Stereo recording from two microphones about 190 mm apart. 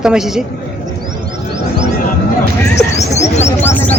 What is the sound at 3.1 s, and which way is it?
Bird, 35° left (ahead or behind).